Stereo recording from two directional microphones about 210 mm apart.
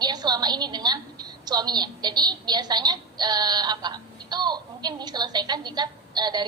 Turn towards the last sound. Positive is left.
turn(degrees=-20)  # may be behind; listen again after turning